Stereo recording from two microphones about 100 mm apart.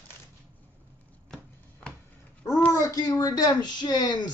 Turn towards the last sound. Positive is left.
turn(degrees=45)  # may be behind; listen again after turning